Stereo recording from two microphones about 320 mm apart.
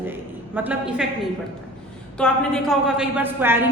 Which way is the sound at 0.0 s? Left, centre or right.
Centre.